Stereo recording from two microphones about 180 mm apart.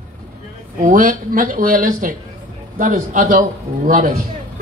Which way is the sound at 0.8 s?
45° right (ahead or behind).